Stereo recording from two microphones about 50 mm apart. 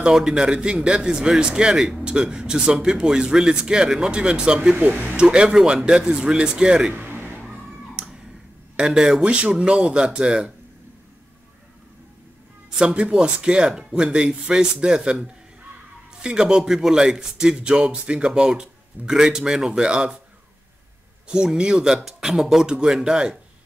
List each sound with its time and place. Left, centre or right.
0.0 s speech: centre
4.7 s speech: right
5.1 s speech: right
6.9 s a sound: right
7.9 s a sound: centre
8.7 s speech: centre
12.7 s speech: right
21.5 s speech: centre